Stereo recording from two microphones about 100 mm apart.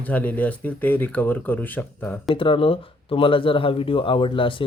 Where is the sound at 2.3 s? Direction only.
60° left (ahead or behind).